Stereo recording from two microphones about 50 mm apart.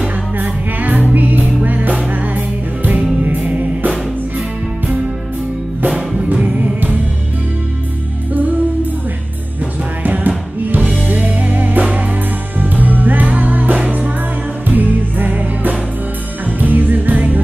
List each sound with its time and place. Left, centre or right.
0.4 s music: right
3.2 s music: right
5.9 s music: centre
6.3 s music: right
8.3 s music: right
10.0 s music: right